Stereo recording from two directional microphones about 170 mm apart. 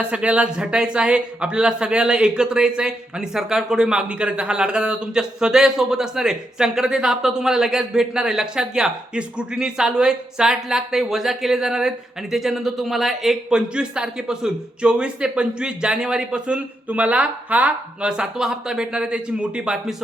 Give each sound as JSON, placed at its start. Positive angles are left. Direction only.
{"t": 0.0, "sound": "speech", "side_deg": -5}